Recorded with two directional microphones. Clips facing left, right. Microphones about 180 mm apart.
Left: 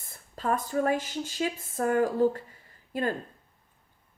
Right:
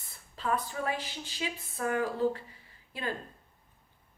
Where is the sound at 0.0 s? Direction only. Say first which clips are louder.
Left 4 dB; 45° left (ahead or behind).